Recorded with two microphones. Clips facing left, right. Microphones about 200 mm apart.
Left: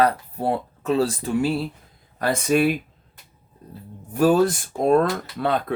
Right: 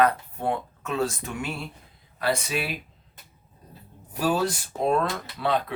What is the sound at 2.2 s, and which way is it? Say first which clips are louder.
Speech: left 8 dB; 50° left (ahead or behind).